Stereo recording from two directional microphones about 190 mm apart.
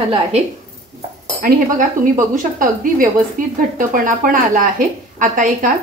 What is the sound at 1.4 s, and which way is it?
Speech, 45° right (ahead or behind).